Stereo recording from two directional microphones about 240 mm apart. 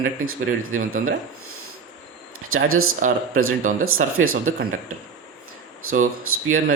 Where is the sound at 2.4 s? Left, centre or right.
Right.